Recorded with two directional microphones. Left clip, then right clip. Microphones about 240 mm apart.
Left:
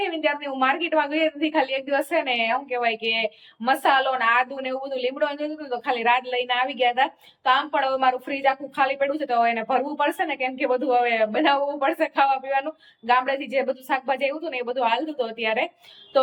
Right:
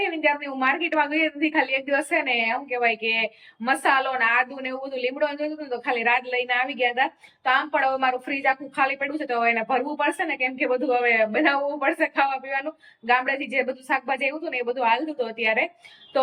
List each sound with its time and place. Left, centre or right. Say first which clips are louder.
0.0 s a woman's voice: right 1 dB; centre